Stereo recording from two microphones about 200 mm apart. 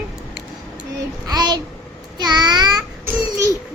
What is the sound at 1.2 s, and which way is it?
Child singing, 20° right (ahead or behind).